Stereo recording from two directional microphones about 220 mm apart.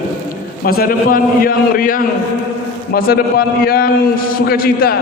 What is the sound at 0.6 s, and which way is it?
A man's voice, 45° left (ahead or behind).